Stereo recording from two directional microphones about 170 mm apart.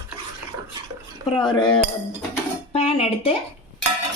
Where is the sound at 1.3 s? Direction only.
25° left (ahead or behind).